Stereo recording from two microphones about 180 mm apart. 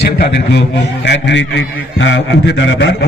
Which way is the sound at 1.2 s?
85° left.